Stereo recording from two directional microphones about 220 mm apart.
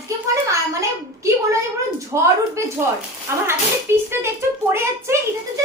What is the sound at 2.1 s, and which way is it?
Speech, 15° right (ahead or behind).